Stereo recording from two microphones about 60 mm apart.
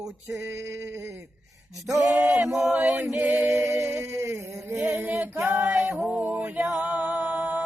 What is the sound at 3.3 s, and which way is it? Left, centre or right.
Chant, right.